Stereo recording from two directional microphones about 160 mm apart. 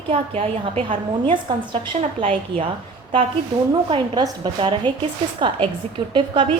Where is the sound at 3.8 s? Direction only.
30° right (ahead or behind).